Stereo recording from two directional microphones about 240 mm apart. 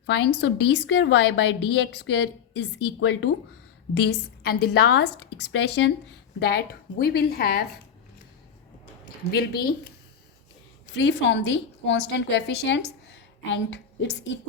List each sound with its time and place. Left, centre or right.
0.0 s a woman's voice: left
9.3 s a woman's voice: left
10.9 s a woman's voice: left